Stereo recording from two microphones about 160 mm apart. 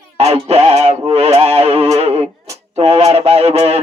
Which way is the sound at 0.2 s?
40° right (ahead or behind).